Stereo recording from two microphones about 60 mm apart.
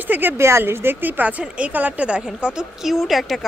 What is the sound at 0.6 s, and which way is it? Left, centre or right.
A woman's voice, right.